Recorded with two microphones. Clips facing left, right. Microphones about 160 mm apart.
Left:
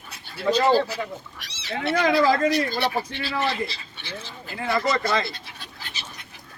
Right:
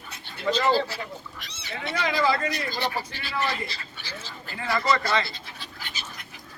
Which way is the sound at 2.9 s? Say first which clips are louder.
Left 4 dB; 25° left (ahead or behind).